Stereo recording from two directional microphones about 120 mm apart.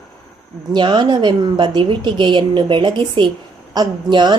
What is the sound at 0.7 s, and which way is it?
A woman's voice, 40° right (ahead or behind).